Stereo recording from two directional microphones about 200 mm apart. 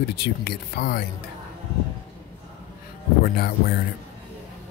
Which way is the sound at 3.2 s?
50° left (ahead or behind).